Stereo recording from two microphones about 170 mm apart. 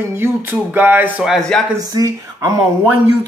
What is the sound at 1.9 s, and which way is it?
Speech, 20° right (ahead or behind).